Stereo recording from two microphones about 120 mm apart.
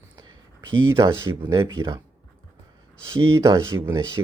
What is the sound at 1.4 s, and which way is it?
Speech, 25° right (ahead or behind).